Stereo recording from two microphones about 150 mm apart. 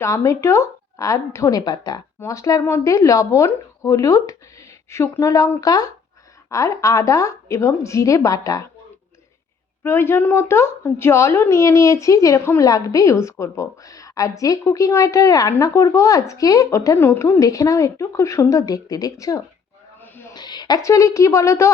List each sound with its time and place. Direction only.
0.0 s a woman's voice: 20° left (ahead or behind)
9.8 s a woman's voice: 15° left (ahead or behind)
20.0 s snake: 15° left (ahead or behind)
20.3 s a woman's voice: 30° left (ahead or behind)